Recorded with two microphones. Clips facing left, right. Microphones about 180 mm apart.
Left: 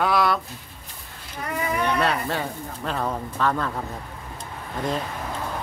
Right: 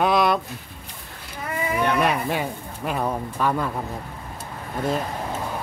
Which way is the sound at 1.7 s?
10° right (ahead or behind).